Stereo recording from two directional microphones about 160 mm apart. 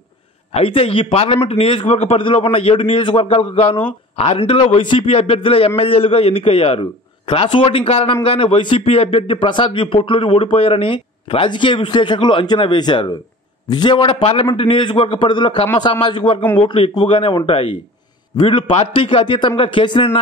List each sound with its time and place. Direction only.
0.5 s a man's voice: 35° left (ahead or behind)
16.3 s speech: 10° left (ahead or behind)
16.6 s a man's voice: 30° left (ahead or behind)